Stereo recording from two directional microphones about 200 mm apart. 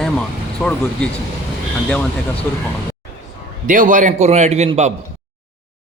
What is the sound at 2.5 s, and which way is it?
Speech, 10° left (ahead or behind).